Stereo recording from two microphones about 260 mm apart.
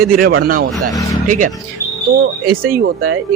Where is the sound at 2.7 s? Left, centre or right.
Right.